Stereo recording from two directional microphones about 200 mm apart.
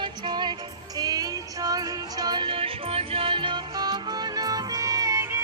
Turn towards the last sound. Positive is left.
turn(degrees=-15)  # may be behind; listen again after turning